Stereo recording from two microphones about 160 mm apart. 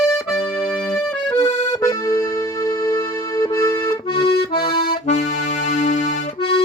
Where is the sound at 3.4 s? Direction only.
20° left (ahead or behind).